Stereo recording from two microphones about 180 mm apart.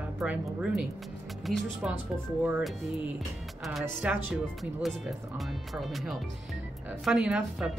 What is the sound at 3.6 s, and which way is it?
Speech, 5° right (ahead or behind).